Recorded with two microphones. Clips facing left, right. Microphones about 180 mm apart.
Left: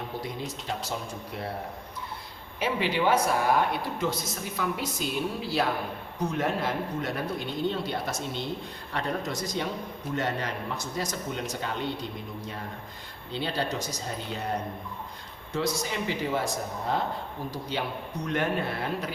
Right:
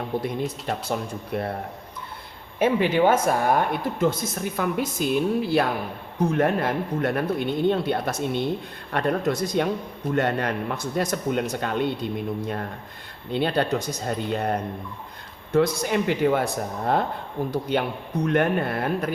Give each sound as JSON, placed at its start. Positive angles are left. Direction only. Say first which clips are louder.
{"t": 0.2, "sound": "speech", "louder": "right 7 dB", "side_deg": -55}
{"t": 2.6, "sound": "speech", "louder": "right 8 dB", "side_deg": -50}
{"t": 13.3, "sound": "speech", "louder": "right 7 dB", "side_deg": -60}